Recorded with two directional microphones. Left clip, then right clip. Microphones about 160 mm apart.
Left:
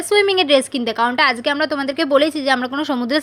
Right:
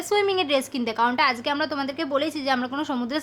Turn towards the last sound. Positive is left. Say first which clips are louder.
# left 8 dB
turn(degrees=25)  # may be behind; listen again after turning